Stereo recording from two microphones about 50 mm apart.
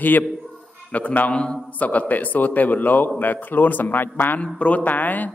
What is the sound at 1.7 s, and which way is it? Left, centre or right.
A man's voice, left.